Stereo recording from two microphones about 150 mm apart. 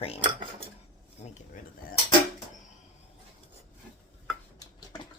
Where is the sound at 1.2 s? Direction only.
45° left (ahead or behind).